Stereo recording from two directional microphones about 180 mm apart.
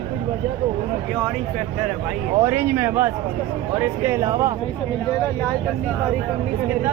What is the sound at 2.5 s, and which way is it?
Speech, 10° right (ahead or behind).